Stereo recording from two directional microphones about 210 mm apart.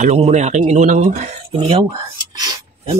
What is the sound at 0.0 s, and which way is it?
Speech, 30° right (ahead or behind).